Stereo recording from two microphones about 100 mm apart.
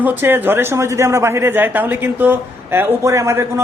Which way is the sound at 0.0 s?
20° right (ahead or behind).